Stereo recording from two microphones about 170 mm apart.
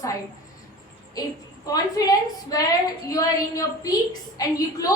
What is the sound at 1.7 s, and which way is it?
A woman's voice, 20° left (ahead or behind).